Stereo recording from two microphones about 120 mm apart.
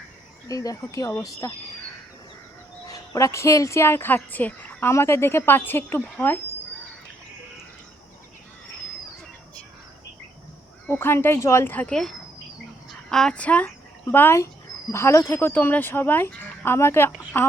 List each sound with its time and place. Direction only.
0.4 s speech: 30° left (ahead or behind)
2.9 s speech: 30° left (ahead or behind)
10.8 s a woman's voice: 20° left (ahead or behind)